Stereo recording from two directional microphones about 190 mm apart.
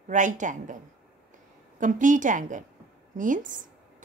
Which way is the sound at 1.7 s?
40° right (ahead or behind).